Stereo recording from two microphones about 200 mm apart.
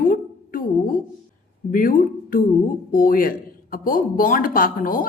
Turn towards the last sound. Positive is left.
turn(degrees=45)  # may be behind; listen again after turning